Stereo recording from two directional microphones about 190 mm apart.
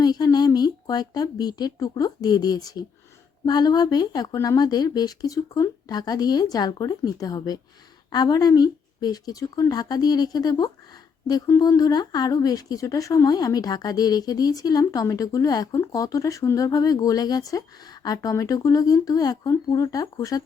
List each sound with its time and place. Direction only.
0.0 s speech: 20° left (ahead or behind)